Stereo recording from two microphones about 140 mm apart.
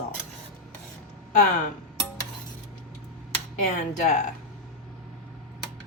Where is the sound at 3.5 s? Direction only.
60° left (ahead or behind).